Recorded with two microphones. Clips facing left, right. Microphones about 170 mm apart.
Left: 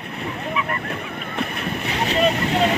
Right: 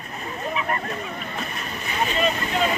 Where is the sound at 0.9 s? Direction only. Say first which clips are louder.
Left 1 dB; 65° left (ahead or behind).